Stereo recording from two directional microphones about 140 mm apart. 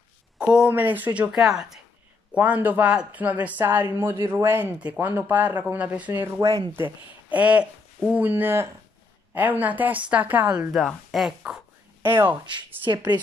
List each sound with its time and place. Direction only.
0.4 s speech: 5° right (ahead or behind)
7.2 s a sound: 10° right (ahead or behind)
8.1 s speech: 15° right (ahead or behind)
12.0 s speech: 15° right (ahead or behind)
12.9 s speech: 30° right (ahead or behind)